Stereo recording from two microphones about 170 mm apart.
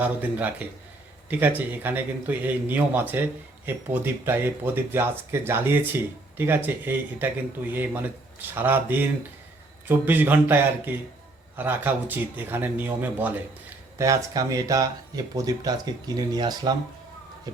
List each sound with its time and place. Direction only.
0.0 s speech: 10° right (ahead or behind)